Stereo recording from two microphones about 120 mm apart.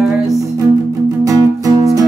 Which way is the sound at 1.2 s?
30° right (ahead or behind).